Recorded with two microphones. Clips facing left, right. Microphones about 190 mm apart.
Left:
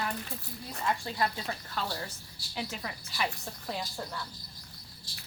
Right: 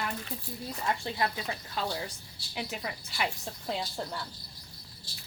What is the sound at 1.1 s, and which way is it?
Speech, 20° right (ahead or behind).